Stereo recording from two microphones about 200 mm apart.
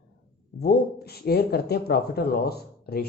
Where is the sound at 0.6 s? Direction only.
50° left (ahead or behind).